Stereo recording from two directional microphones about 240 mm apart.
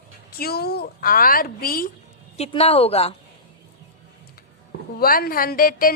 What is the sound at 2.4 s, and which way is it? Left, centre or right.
Speech, left.